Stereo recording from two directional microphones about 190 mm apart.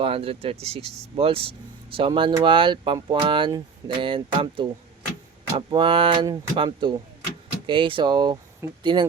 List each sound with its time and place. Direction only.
0.0 s speech: 30° right (ahead or behind)